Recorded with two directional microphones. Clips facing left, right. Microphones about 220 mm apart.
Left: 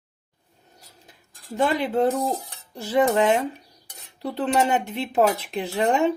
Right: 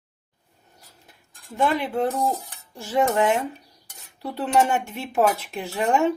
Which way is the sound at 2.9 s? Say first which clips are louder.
Left 2 dB; 20° left (ahead or behind).